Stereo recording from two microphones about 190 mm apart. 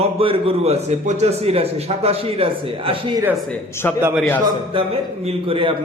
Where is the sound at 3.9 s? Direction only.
5° right (ahead or behind).